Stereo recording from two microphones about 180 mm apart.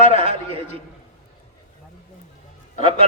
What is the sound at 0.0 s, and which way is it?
Speech, 45° left (ahead or behind).